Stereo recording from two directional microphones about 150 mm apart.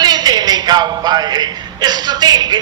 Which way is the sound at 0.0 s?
25° right (ahead or behind).